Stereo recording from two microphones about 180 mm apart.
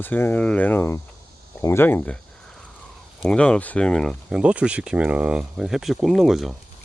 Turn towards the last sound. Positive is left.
turn(degrees=0)  # may be behind; listen again after turning